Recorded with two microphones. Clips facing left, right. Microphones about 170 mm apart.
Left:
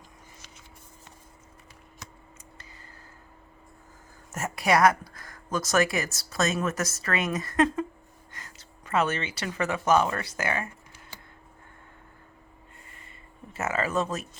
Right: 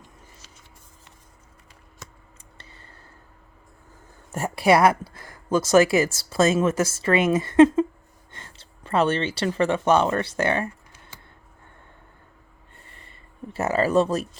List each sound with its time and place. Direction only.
4.3 s speech: 30° right (ahead or behind)
13.5 s speech: 35° right (ahead or behind)